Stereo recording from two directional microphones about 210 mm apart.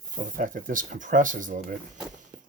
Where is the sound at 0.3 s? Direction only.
40° right (ahead or behind).